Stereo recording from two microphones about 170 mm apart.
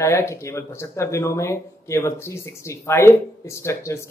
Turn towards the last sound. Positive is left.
turn(degrees=15)  # may be behind; listen again after turning